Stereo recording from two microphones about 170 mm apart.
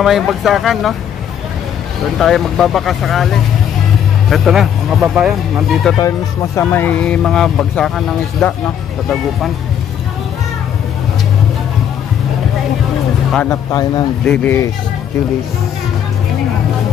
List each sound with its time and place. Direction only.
0.0 s speech: centre (ahead or behind)
2.1 s speech: centre (ahead or behind)
5.9 s speech: 20° left (ahead or behind)
13.5 s speech: 20° left (ahead or behind)
14.2 s speech: 5° left (ahead or behind)